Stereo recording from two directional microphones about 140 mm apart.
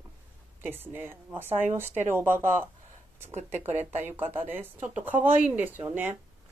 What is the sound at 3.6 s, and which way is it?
Speech, 15° right (ahead or behind).